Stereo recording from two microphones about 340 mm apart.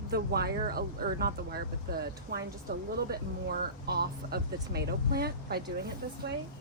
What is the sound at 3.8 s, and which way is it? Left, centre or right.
Speech, right.